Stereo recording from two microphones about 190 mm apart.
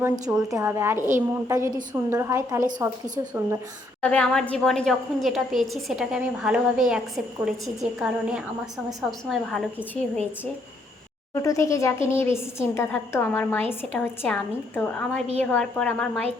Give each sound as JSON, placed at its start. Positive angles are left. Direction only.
{"t": 0.0, "sound": "a woman's voice", "side_deg": -5}
{"t": 4.0, "sound": "a woman's voice", "side_deg": 5}
{"t": 11.3, "sound": "a woman's voice", "side_deg": 15}